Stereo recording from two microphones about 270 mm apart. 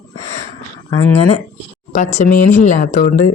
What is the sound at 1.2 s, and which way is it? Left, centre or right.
Speech, left.